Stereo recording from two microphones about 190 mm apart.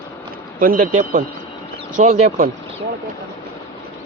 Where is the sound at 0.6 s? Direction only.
45° right (ahead or behind).